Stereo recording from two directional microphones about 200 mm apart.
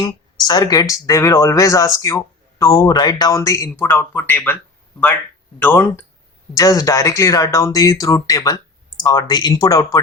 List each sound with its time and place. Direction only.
0.0 s speech: 20° left (ahead or behind)
5.5 s speech: 10° left (ahead or behind)